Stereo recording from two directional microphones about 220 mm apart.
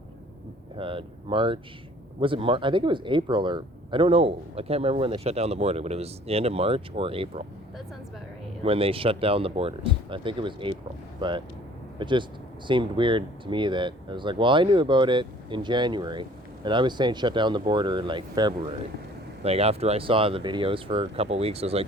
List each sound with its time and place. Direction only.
0.8 s speech: 25° right (ahead or behind)
8.6 s speech: 25° right (ahead or behind)